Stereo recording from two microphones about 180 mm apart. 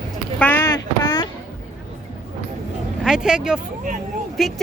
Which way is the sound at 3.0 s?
5° right (ahead or behind).